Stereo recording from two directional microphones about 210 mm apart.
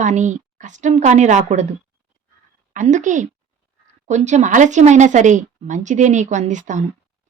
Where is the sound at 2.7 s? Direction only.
35° right (ahead or behind).